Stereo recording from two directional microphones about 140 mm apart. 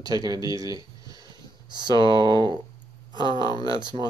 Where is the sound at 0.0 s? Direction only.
25° right (ahead or behind).